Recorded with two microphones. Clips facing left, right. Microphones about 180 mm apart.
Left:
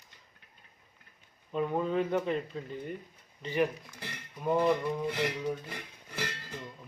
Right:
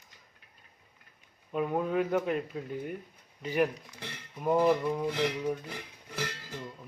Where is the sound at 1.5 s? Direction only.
5° right (ahead or behind).